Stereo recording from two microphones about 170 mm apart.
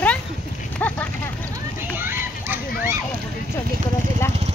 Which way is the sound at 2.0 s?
15° right (ahead or behind).